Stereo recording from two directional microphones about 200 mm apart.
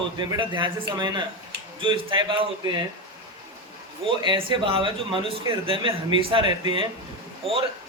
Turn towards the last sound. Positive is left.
turn(degrees=-30)  # may be behind; listen again after turning